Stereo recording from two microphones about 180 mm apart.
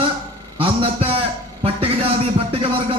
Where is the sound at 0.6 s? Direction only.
30° right (ahead or behind).